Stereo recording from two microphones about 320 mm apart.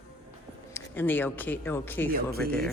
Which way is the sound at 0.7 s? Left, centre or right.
Centre.